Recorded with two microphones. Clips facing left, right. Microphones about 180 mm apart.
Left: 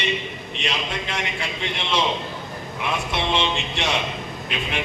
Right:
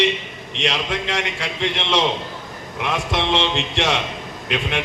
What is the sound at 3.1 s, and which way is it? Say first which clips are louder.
Speech: right 3 dB; 80° right.